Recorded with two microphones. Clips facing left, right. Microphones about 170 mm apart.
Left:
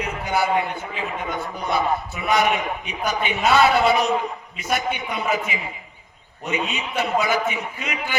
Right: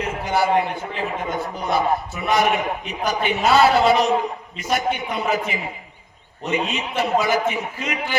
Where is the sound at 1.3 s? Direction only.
35° right (ahead or behind).